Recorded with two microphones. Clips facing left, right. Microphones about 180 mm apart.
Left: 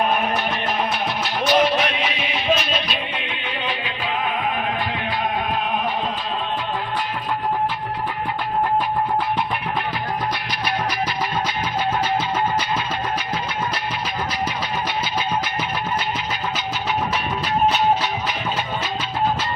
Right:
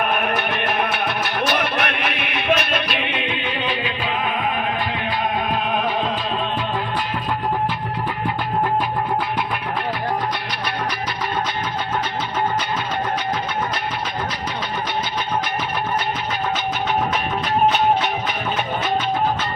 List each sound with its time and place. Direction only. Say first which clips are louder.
0.0 s music: even; 60° right (ahead or behind)